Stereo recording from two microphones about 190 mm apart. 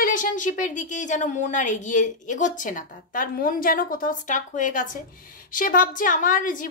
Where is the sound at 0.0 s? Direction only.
45° left (ahead or behind).